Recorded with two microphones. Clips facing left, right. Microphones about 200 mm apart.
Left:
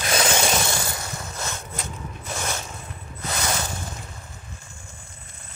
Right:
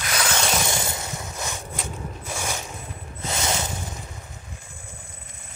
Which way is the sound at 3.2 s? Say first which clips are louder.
Right 1 dB; 25° right (ahead or behind).